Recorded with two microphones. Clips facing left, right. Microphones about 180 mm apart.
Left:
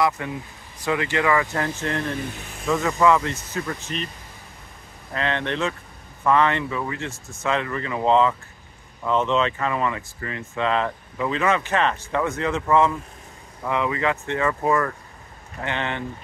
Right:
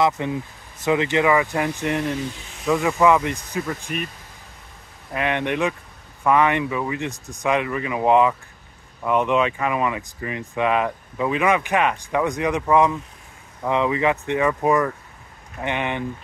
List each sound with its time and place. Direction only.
0.0 s speech: 20° right (ahead or behind)
5.1 s speech: 15° right (ahead or behind)